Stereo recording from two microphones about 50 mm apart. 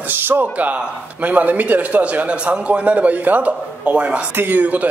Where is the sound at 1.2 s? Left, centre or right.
Right.